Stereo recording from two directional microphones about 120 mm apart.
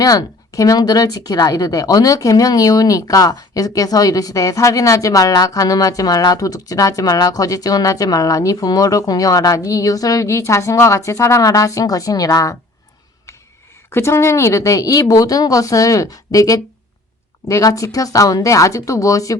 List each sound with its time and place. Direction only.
0.0 s speech: 30° left (ahead or behind)
13.9 s speech: 20° left (ahead or behind)